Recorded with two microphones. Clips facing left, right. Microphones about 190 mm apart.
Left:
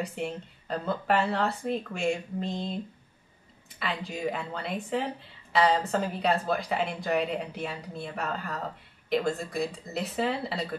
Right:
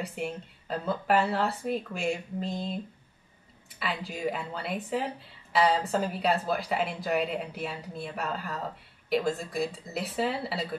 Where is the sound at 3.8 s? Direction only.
5° right (ahead or behind).